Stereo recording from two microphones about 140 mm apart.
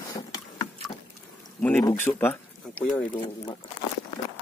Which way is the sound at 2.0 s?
15° left (ahead or behind).